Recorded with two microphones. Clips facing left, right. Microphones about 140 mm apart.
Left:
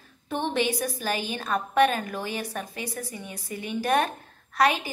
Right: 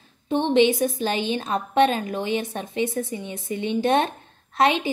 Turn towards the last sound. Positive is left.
turn(degrees=-25)  # may be behind; listen again after turning